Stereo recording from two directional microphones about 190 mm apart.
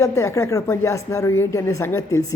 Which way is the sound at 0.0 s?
15° left (ahead or behind).